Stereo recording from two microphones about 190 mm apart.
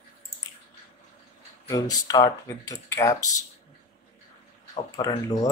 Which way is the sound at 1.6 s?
20° left (ahead or behind).